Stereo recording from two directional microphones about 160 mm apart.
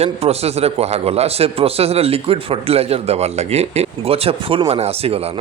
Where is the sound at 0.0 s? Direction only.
40° right (ahead or behind).